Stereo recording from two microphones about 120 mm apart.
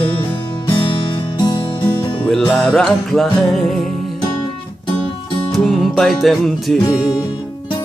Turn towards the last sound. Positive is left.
turn(degrees=0)  # may be behind; listen again after turning